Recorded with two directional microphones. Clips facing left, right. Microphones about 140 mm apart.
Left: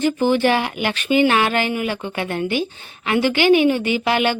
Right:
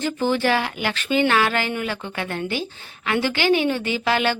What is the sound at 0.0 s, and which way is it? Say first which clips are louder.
A woman's voice: left 4 dB; 15° left (ahead or behind).